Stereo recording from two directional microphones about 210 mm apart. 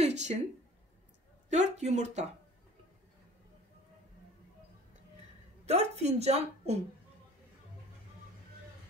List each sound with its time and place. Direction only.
0.0 s a sound: 35° right (ahead or behind)
1.5 s a woman's voice: 35° right (ahead or behind)
5.7 s a woman's voice: 30° right (ahead or behind)